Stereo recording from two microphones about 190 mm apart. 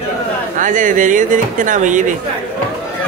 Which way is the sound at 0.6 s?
45° right (ahead or behind).